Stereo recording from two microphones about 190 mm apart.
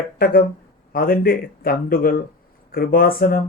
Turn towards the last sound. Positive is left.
turn(degrees=50)  # may be behind; listen again after turning